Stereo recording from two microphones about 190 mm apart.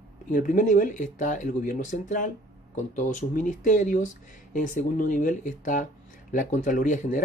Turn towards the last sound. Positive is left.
turn(degrees=45)  # may be behind; listen again after turning